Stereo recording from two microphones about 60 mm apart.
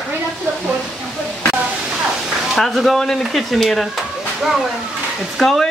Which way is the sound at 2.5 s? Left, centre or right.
Centre.